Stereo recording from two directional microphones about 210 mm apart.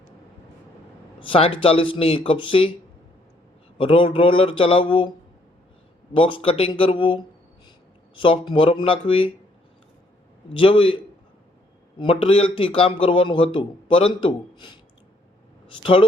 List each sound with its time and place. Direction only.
1.2 s a man's voice: 25° left (ahead or behind)
3.8 s a man's voice: 25° left (ahead or behind)
6.1 s a man's voice: 25° left (ahead or behind)
10.5 s a man's voice: 25° left (ahead or behind)